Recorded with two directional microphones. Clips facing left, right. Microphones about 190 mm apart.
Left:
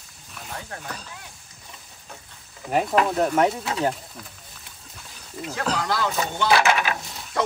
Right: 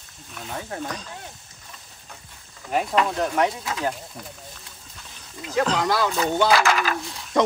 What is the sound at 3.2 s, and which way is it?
Speech, 30° left (ahead or behind).